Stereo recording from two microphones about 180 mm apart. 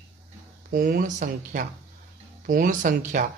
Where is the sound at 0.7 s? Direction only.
50° right (ahead or behind).